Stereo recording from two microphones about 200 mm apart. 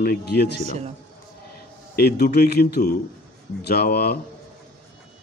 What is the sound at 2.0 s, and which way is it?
Speech, 50° left (ahead or behind).